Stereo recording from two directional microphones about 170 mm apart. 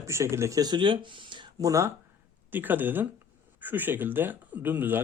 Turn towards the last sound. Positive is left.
turn(degrees=-10)  # may be behind; listen again after turning